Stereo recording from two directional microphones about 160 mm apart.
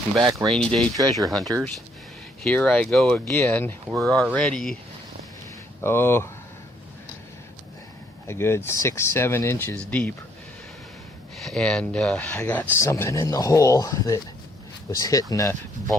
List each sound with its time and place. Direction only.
0.3 s speech: centre (ahead or behind)
5.8 s speech: 15° left (ahead or behind)
8.3 s speech: 15° left (ahead or behind)
11.3 s speech: centre (ahead or behind); by 15.5 s 20° left (ahead or behind)